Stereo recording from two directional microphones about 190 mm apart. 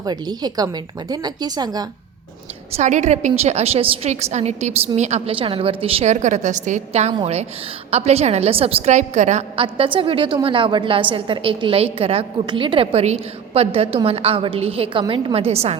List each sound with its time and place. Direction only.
0.0 s a woman's voice: 20° right (ahead or behind)
2.7 s a woman's voice: 40° right (ahead or behind)